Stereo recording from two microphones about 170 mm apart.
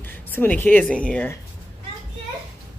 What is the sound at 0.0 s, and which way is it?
Speech, 10° left (ahead or behind).